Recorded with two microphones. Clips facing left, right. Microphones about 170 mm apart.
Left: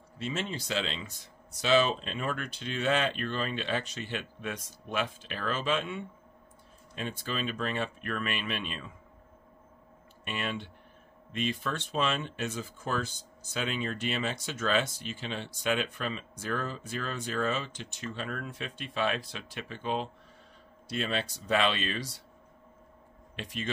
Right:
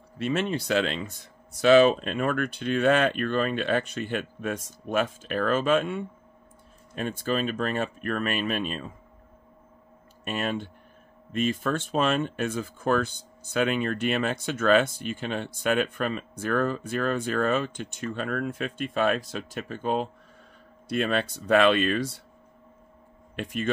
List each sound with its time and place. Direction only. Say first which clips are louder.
0.2 s speech: right 8 dB; 60° right (ahead or behind); by 8.9 s 45° right (ahead or behind)
10.2 s speech: right 6 dB; 45° right (ahead or behind)
23.3 s speech: right 7 dB; 50° right (ahead or behind)